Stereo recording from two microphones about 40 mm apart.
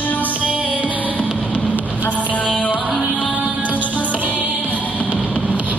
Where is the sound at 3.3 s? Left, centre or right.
Right.